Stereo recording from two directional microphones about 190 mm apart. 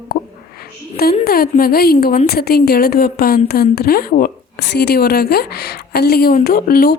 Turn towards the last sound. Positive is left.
turn(degrees=50)  # may be behind; listen again after turning